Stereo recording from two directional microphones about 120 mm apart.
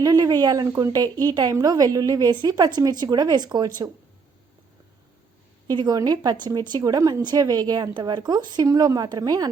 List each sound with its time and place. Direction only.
0.0 s speech: 30° right (ahead or behind)
5.6 s speech: 35° right (ahead or behind)